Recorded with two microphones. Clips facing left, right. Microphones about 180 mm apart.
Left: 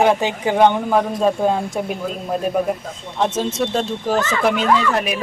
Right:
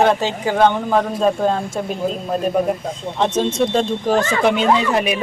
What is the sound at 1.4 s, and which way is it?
Speech, 15° left (ahead or behind).